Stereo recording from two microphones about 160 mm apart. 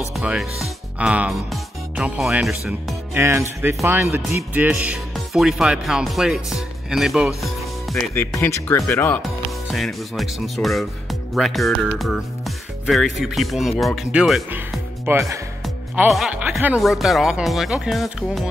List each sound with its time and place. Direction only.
0.1 s speech: 5° right (ahead or behind)
3.2 s speech: 15° right (ahead or behind)
8.4 s speech: 20° left (ahead or behind)
9.2 s speech: centre (ahead or behind)
15.0 s speech: 15° right (ahead or behind)
16.1 s speech: 5° right (ahead or behind)